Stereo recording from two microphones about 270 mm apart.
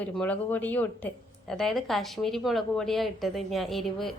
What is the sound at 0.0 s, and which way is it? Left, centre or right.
A woman's voice, centre.